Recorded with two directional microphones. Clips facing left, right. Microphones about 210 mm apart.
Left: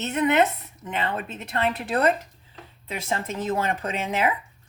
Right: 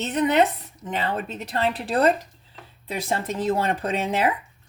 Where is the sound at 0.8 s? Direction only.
35° right (ahead or behind).